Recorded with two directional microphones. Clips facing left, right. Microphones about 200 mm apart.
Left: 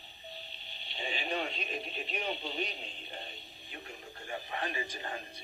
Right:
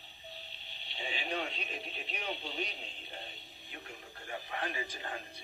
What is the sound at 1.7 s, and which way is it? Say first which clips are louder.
Radio: left 4 dB; 40° left (ahead or behind).